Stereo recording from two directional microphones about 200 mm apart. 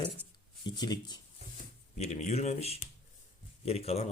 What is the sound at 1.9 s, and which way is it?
Speech, 35° left (ahead or behind).